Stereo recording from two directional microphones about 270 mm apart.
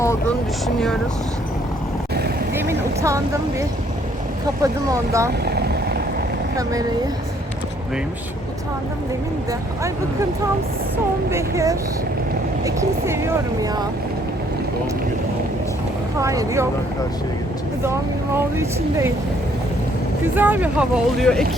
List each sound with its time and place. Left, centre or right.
0.0 s vehicle: centre
2.5 s speech: centre
4.6 s speech: centre
5.5 s vehicle: right
9.5 s speech: centre
11.3 s speech: centre
16.1 s speech: centre
18.3 s speech: centre
20.2 s speech: centre